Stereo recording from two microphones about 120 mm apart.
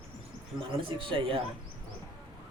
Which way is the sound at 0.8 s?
45° right (ahead or behind).